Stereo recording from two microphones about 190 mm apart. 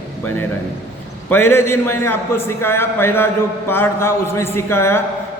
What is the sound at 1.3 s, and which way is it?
Speech, 10° left (ahead or behind).